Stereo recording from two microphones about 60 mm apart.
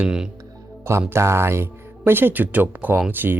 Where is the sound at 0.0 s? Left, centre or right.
Centre.